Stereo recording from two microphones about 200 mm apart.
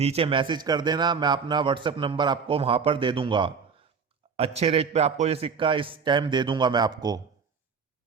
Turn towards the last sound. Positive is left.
turn(degrees=-20)  # may be behind; listen again after turning